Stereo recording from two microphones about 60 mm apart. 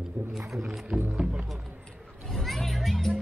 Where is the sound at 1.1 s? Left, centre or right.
Centre.